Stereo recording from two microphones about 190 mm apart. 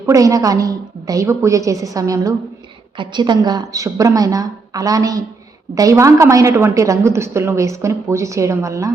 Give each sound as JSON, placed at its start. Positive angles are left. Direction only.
{"t": 0.0, "sound": "a woman's voice", "side_deg": -15}